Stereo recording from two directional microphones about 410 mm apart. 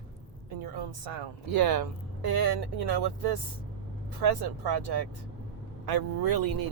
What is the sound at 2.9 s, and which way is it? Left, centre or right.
Speech, right.